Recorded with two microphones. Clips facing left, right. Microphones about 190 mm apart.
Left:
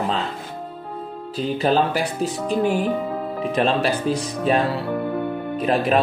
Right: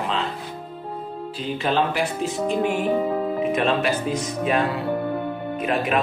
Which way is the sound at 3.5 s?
35° left (ahead or behind).